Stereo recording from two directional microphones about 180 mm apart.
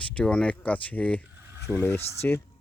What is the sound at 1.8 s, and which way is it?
Speech, 15° left (ahead or behind).